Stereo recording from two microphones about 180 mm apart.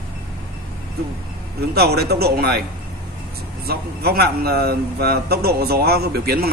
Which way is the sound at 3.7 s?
60° right (ahead or behind).